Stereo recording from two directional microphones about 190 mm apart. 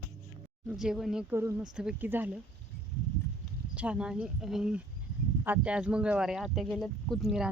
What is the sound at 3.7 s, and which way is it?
Speech, 5° right (ahead or behind).